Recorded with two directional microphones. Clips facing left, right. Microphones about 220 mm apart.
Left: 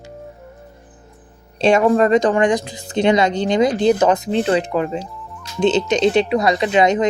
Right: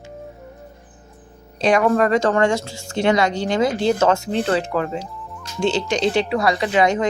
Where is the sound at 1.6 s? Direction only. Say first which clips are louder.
Left 3 dB; 25° left (ahead or behind).